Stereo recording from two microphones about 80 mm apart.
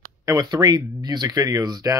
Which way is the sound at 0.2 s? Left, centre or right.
Right.